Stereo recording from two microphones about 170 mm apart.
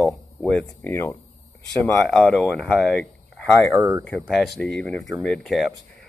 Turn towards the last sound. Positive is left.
turn(degrees=0)  # may be behind; listen again after turning